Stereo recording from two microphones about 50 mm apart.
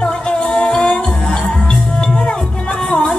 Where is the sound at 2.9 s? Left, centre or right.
Centre.